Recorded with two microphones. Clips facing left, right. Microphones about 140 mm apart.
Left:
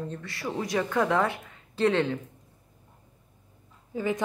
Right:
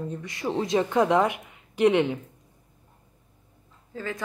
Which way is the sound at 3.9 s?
15° left (ahead or behind).